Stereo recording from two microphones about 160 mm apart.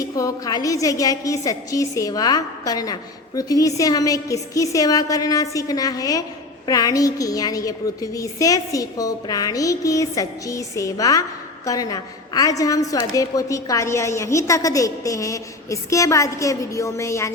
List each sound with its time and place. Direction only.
0.0 s a woman's voice: 20° left (ahead or behind)